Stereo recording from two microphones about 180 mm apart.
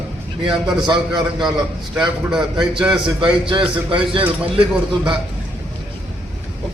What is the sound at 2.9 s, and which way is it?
Speech, 25° right (ahead or behind).